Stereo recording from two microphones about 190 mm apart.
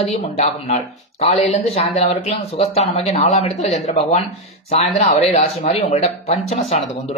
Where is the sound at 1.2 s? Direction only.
30° left (ahead or behind).